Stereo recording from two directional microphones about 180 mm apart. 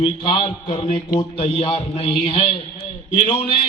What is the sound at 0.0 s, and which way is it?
A man's voice, 30° left (ahead or behind).